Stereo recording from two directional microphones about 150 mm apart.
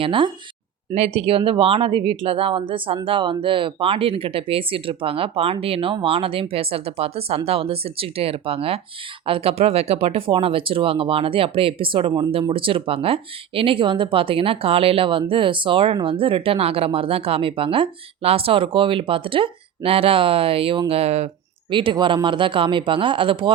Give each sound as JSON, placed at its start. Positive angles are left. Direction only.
{"t": 0.0, "sound": "speech", "side_deg": -35}
{"t": 21.7, "sound": "speech", "side_deg": -35}